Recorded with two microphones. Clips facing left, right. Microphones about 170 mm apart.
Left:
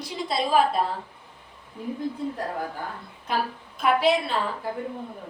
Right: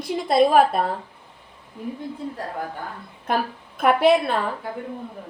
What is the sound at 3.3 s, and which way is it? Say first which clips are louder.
A woman's voice: right 3 dB; 55° right (ahead or behind).